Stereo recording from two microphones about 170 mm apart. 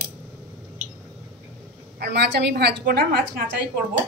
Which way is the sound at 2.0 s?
80° right.